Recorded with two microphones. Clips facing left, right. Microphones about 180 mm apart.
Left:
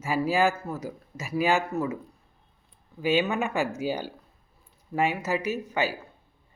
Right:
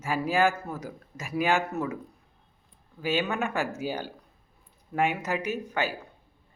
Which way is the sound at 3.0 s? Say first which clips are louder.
Left 3 dB; 10° left (ahead or behind).